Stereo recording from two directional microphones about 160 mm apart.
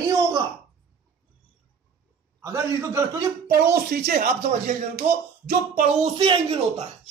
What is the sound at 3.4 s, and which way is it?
Speech, 75° right (ahead or behind).